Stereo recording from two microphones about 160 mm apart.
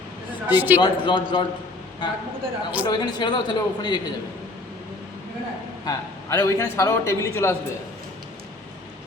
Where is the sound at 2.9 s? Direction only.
25° left (ahead or behind).